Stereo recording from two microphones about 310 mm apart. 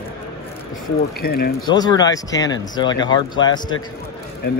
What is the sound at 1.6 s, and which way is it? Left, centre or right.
Speech, centre.